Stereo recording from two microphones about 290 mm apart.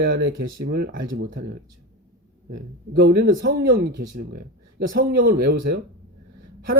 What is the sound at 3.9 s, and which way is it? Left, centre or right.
Speech, right.